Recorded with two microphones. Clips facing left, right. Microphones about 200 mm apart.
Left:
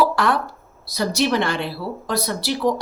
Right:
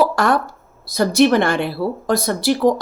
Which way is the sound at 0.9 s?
50° right (ahead or behind).